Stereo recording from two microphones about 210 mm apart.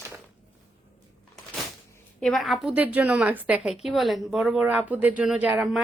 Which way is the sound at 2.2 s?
Centre (ahead or behind).